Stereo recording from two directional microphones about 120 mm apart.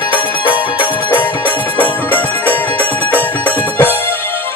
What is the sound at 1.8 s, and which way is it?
Music, 15° left (ahead or behind).